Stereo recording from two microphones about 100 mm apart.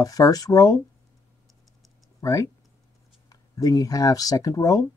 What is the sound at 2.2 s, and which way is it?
Speech, 35° left (ahead or behind).